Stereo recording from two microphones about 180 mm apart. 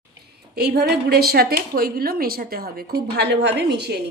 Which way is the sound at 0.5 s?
60° right (ahead or behind).